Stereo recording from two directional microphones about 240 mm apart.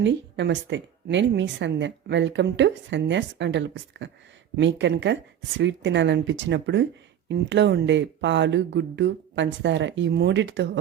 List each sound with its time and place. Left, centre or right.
0.0 s speech: right